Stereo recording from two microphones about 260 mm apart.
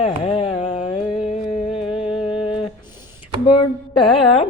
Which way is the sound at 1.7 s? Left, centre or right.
Left.